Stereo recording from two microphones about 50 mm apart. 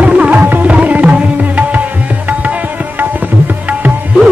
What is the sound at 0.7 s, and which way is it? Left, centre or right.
Tabla, right.